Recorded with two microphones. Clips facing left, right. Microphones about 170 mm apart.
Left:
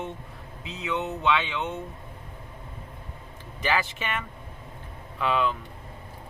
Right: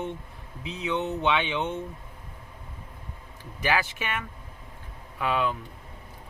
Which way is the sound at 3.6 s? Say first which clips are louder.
Even; 10° right (ahead or behind).